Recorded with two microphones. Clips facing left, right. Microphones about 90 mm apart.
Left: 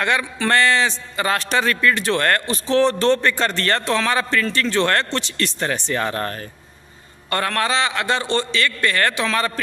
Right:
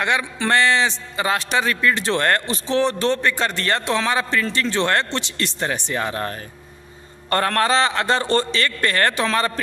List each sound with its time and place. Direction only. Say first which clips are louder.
0.0 s a man's voice: left 1 dB; 20° right (ahead or behind)
7.2 s a man's voice: right 2 dB; 35° right (ahead or behind)